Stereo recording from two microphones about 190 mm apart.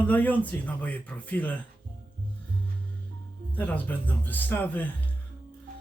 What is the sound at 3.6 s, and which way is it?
Speech, 10° left (ahead or behind).